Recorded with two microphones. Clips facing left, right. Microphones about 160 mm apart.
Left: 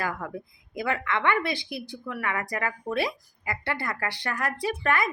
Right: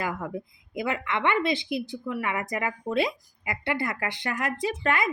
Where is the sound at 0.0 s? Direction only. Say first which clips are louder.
Right 1 dB; 20° right (ahead or behind).